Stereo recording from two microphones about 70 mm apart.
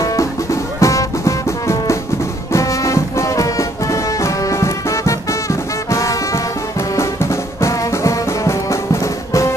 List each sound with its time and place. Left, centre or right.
0.0 s music: left
7.6 s music: left